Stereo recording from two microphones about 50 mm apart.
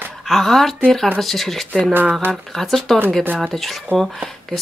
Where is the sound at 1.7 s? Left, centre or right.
Right.